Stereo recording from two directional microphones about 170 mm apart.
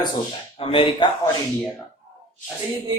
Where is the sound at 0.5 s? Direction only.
35° left (ahead or behind).